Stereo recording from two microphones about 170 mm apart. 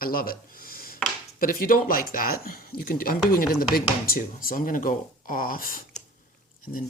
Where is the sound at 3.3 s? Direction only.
55° left (ahead or behind).